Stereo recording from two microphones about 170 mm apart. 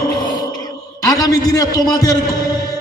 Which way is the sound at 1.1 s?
20° left (ahead or behind).